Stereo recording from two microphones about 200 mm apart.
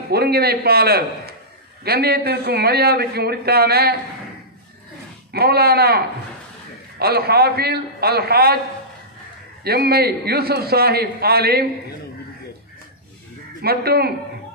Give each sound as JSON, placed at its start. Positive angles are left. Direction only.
{"t": 0.1, "sound": "a man's voice", "side_deg": -50}
{"t": 5.3, "sound": "a man's voice", "side_deg": -50}
{"t": 9.7, "sound": "a man's voice", "side_deg": -50}
{"t": 13.6, "sound": "a man's voice", "side_deg": -50}